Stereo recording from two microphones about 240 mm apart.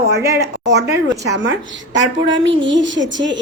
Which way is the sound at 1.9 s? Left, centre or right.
Right.